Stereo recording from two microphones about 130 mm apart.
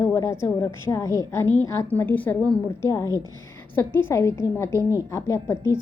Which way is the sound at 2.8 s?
25° left (ahead or behind).